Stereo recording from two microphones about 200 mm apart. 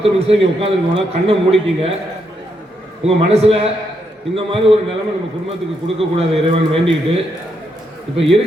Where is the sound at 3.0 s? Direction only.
30° right (ahead or behind).